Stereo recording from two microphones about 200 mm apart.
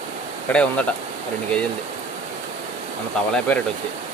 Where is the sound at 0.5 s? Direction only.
5° left (ahead or behind).